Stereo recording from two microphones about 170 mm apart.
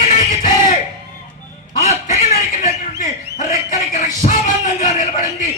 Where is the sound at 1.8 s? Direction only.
45° left (ahead or behind).